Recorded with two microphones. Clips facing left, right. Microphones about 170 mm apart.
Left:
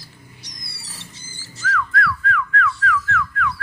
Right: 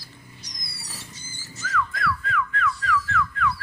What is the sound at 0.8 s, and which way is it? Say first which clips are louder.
Wild animals: right 2 dB; 30° left (ahead or behind).